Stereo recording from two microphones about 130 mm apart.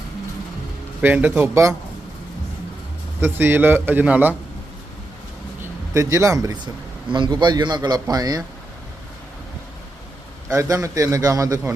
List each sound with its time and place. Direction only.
1.0 s a man's voice: 10° right (ahead or behind)
3.2 s a man's voice: 15° right (ahead or behind)
5.9 s a man's voice: 25° right (ahead or behind)
10.5 s a man's voice: 25° right (ahead or behind)